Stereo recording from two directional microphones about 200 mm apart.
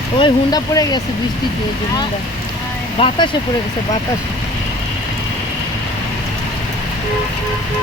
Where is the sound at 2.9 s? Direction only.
25° left (ahead or behind).